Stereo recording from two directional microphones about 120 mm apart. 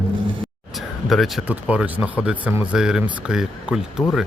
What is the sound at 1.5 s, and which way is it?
Speech, 10° right (ahead or behind).